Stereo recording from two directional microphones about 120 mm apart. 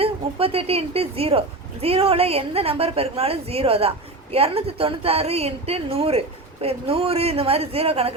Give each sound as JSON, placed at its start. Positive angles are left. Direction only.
{"t": 0.0, "sound": "a woman's voice", "side_deg": -55}